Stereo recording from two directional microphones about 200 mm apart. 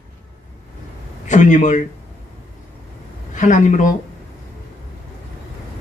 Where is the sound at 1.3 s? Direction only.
40° left (ahead or behind).